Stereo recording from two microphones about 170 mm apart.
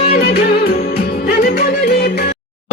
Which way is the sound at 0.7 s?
65° left (ahead or behind).